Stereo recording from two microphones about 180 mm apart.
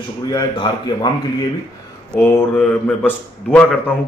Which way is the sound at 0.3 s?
20° left (ahead or behind).